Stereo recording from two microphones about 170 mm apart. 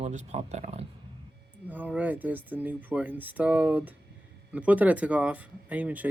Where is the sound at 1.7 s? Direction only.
10° right (ahead or behind).